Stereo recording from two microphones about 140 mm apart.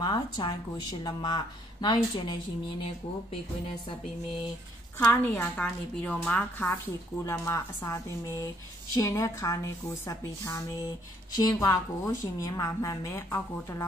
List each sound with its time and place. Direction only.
0.0 s a woman's voice: 30° left (ahead or behind)
5.1 s a woman's voice: 10° left (ahead or behind)